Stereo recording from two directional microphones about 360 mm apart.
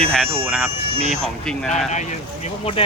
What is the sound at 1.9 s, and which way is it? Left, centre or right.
Speech, centre.